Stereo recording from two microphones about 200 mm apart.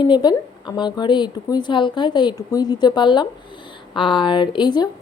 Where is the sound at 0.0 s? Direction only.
20° left (ahead or behind).